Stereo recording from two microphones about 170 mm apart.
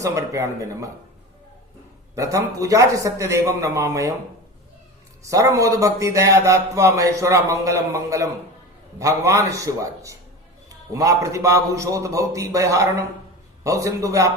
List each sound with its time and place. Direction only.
0.0 s a man's voice: 20° right (ahead or behind)
2.1 s a man's voice: 20° right (ahead or behind)
5.3 s a man's voice: 20° right (ahead or behind)